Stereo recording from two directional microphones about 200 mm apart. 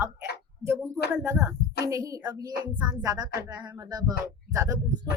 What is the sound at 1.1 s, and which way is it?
A woman's voice, 10° right (ahead or behind).